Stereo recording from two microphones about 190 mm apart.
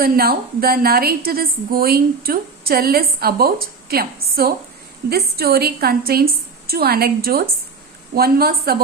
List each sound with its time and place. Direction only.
0.0 s a woman's voice: 50° right (ahead or behind)